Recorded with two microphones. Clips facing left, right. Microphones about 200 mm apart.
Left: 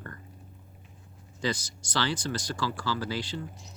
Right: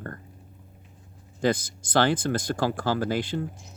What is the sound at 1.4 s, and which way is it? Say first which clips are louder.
Speech: right 7 dB; 55° right (ahead or behind).